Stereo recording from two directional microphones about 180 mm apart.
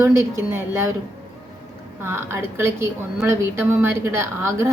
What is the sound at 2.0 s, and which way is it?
A woman's voice, 15° right (ahead or behind).